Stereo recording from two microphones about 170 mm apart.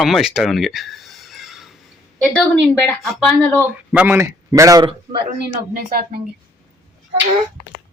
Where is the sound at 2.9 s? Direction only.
5° left (ahead or behind).